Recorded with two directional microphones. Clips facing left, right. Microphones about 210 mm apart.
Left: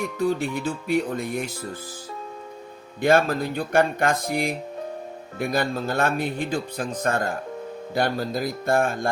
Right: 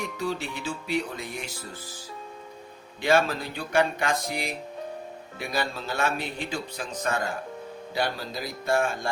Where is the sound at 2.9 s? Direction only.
50° left (ahead or behind).